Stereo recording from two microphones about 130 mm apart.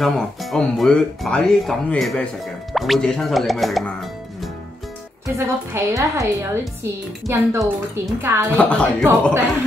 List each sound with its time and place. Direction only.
0.0 s speech: centre (ahead or behind)
5.2 s a woman's voice: 20° right (ahead or behind)
8.5 s speech: 10° left (ahead or behind)